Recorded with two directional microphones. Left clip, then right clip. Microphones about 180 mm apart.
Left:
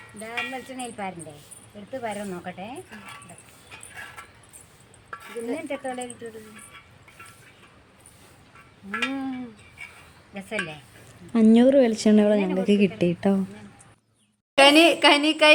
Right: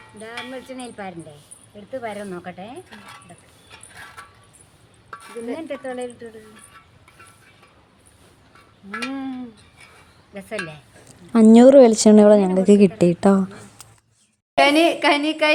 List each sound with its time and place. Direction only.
0.5 s a woman's voice: 25° right (ahead or behind)
3.9 s keys jangling: 20° right (ahead or behind)
5.1 s a sound: 20° right (ahead or behind)
5.5 s a woman's voice: 25° right (ahead or behind)
10.3 s a woman's voice: 35° right (ahead or behind)
14.5 s a woman's voice: 5° left (ahead or behind)